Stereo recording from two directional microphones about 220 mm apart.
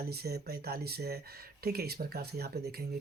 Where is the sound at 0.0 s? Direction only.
45° right (ahead or behind).